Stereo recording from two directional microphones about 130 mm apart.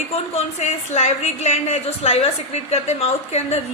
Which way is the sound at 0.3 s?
60° left (ahead or behind).